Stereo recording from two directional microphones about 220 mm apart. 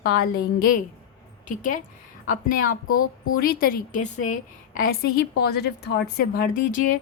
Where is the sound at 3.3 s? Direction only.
40° left (ahead or behind).